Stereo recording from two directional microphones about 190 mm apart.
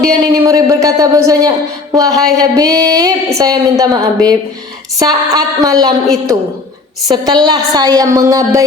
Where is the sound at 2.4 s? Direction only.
20° right (ahead or behind).